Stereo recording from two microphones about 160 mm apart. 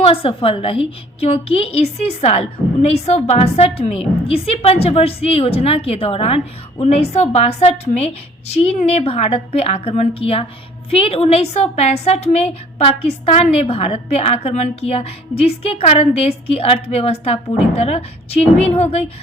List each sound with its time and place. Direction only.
0.0 s a woman's voice: 35° left (ahead or behind)